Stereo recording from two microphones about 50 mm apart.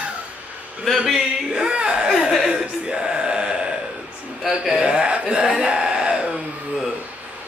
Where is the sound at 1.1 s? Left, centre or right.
Centre.